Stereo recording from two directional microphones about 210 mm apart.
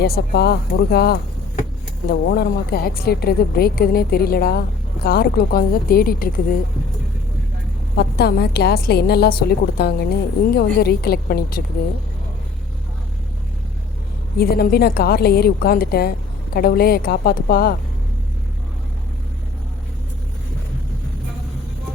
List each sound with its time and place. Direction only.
0.0 s speech: 50° left (ahead or behind)
7.9 s speech: 50° left (ahead or behind)
14.3 s speech: 45° left (ahead or behind)